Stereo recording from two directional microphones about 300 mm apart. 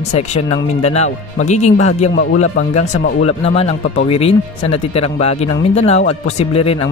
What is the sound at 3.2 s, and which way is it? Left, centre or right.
Speech, centre.